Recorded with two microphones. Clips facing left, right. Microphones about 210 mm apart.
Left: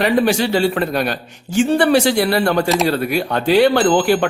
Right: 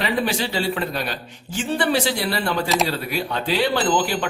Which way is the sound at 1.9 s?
70° left (ahead or behind).